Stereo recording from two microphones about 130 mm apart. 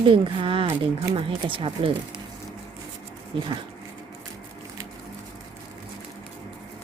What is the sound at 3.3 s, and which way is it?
Speech, 40° right (ahead or behind).